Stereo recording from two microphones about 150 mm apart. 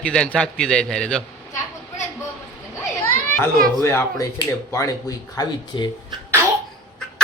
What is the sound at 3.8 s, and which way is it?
Speech, 15° left (ahead or behind).